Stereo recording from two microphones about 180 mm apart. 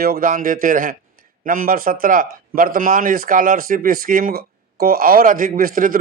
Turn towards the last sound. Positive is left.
turn(degrees=-50)  # may be behind; listen again after turning